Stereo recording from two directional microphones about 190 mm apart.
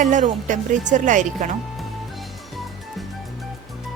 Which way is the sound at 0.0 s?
40° right (ahead or behind).